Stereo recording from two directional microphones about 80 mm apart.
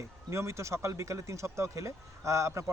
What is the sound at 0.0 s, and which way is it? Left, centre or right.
Speech, right.